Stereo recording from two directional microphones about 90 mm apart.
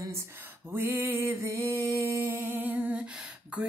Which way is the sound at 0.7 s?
25° right (ahead or behind).